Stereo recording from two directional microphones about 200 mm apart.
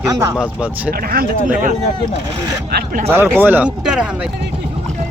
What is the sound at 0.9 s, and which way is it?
Speech, 50° right (ahead or behind).